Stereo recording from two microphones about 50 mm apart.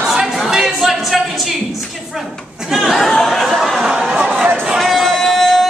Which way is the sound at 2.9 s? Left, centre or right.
Centre.